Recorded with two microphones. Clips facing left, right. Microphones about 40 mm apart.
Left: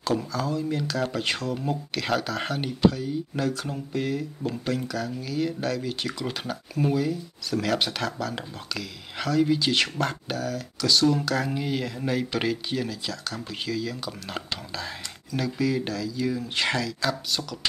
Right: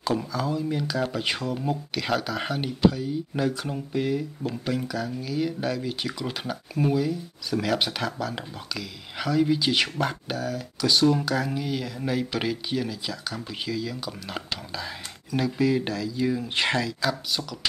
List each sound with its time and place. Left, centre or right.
0.0 s speech: centre
11.5 s speech: centre
15.3 s speech: centre
17.0 s speech: centre